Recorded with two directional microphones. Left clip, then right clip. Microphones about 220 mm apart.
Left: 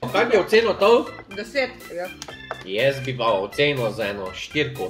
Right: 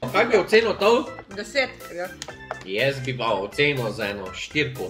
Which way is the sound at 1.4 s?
20° right (ahead or behind).